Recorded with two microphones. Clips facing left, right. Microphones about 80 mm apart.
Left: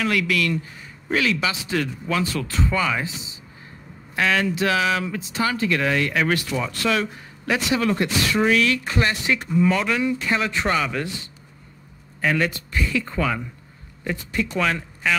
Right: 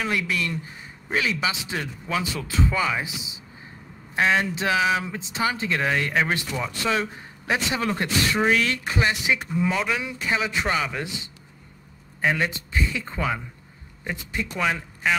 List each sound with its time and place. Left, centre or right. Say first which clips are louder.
0.0 s a man's voice: left 4 dB; right
4.1 s speech: even; right
8.8 s a man's voice: left 1 dB; centre
12.2 s a man's voice: left 2 dB; centre